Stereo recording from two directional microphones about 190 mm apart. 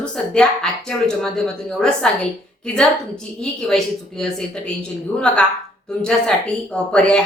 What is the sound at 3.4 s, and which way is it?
A woman's voice, 5° left (ahead or behind).